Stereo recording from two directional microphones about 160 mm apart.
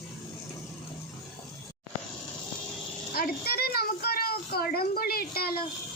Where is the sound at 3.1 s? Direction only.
70° left (ahead or behind).